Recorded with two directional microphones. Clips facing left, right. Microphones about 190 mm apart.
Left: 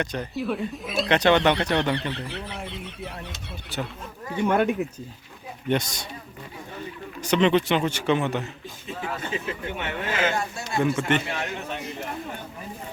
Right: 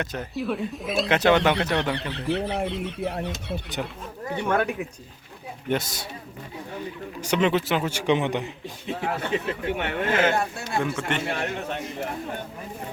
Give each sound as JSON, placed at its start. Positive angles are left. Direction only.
{"t": 0.0, "sound": "speech", "side_deg": -5}
{"t": 3.8, "sound": "a man's voice", "side_deg": -10}
{"t": 4.4, "sound": "speech", "side_deg": 20}
{"t": 5.6, "sound": "speech", "side_deg": -5}
{"t": 7.2, "sound": "a man's voice", "side_deg": -10}
{"t": 8.9, "sound": "a man's voice", "side_deg": -65}